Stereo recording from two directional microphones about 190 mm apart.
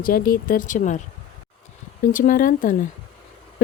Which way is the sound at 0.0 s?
50° left (ahead or behind).